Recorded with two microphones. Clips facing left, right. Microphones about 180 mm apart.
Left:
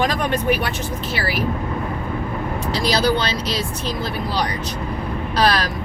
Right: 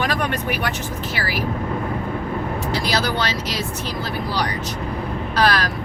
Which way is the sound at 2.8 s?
15° left (ahead or behind).